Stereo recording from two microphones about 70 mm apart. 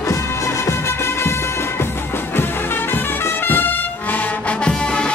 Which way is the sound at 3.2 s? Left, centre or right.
Left.